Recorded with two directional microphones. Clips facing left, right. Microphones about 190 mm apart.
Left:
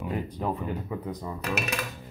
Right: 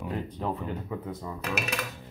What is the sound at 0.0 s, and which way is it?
Speech, 10° left (ahead or behind).